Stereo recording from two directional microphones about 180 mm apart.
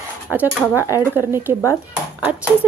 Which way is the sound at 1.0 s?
10° right (ahead or behind).